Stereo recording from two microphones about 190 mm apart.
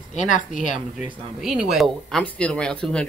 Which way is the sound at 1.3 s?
Centre (ahead or behind).